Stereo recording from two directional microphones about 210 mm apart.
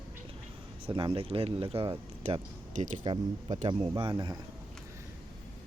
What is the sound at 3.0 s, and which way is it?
Speech, 20° right (ahead or behind).